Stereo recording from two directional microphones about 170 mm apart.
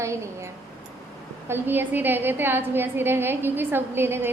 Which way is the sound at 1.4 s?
10° right (ahead or behind).